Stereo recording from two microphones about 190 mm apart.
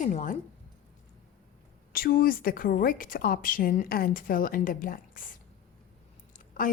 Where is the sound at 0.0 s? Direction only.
40° left (ahead or behind).